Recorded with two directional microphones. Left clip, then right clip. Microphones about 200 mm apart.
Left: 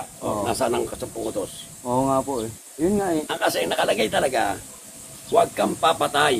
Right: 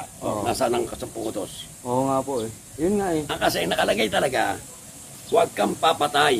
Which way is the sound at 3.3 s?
5° right (ahead or behind).